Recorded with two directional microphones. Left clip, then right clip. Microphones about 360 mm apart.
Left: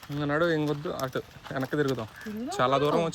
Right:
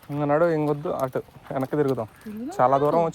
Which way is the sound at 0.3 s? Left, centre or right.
Centre.